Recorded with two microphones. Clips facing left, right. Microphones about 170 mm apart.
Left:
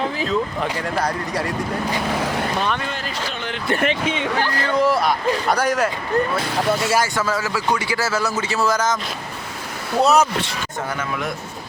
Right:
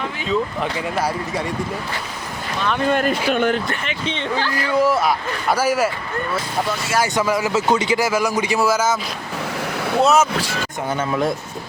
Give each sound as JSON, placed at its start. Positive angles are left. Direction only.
{"t": 0.9, "sound": "speech", "side_deg": -5}
{"t": 2.8, "sound": "speech", "side_deg": -55}
{"t": 4.0, "sound": "speech", "side_deg": 10}
{"t": 4.7, "sound": "speech", "side_deg": -5}
{"t": 7.0, "sound": "a man's voice", "side_deg": -15}
{"t": 10.0, "sound": "speech", "side_deg": 0}